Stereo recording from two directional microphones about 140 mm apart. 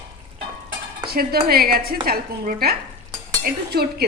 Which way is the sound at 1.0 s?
90° right.